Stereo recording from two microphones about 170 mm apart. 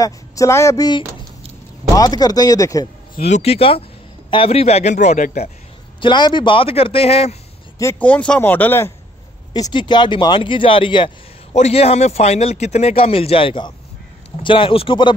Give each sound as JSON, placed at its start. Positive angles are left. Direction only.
{"t": 0.0, "sound": "speech", "side_deg": 20}
{"t": 3.3, "sound": "a man's voice", "side_deg": 40}
{"t": 5.9, "sound": "a man's voice", "side_deg": 25}
{"t": 7.8, "sound": "speech", "side_deg": 10}
{"t": 9.5, "sound": "a man's voice", "side_deg": 25}